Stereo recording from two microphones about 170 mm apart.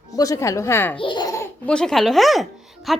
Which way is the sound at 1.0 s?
25° left (ahead or behind).